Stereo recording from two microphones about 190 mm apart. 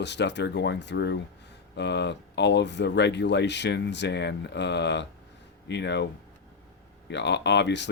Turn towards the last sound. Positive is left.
turn(degrees=65)  # may be behind; listen again after turning